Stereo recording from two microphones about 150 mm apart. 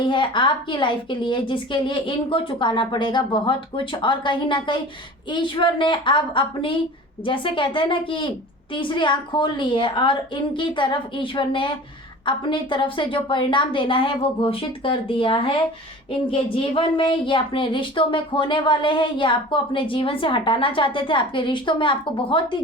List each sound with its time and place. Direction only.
0.0 s speech: 30° left (ahead or behind)